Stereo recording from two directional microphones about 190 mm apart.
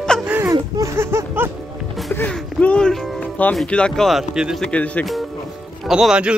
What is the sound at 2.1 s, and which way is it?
Music, 10° left (ahead or behind).